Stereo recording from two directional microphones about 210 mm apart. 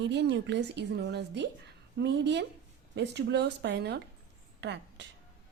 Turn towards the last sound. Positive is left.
turn(degrees=-55)  # may be behind; listen again after turning